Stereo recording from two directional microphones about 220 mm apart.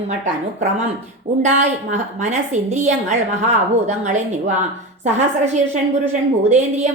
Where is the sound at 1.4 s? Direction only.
35° right (ahead or behind).